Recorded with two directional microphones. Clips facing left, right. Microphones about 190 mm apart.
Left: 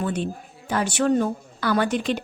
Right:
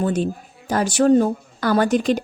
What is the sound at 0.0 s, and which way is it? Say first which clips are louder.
Speech: right 5 dB; 40° right (ahead or behind).